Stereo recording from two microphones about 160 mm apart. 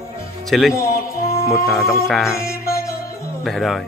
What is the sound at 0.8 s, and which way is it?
Music, 20° left (ahead or behind).